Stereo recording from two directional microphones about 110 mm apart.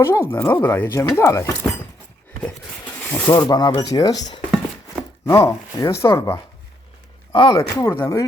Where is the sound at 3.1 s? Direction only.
35° left (ahead or behind).